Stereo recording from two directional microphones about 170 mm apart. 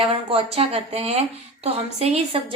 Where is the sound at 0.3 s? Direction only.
35° right (ahead or behind).